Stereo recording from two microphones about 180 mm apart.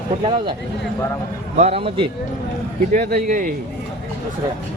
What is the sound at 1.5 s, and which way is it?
Speech, 35° right (ahead or behind).